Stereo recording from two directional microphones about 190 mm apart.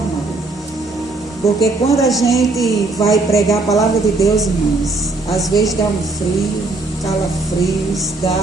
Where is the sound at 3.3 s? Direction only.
15° left (ahead or behind).